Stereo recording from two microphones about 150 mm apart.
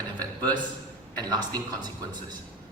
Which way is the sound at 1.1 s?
30° right (ahead or behind).